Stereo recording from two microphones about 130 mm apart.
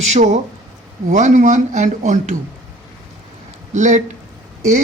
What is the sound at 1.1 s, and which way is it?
Speech, 70° right (ahead or behind).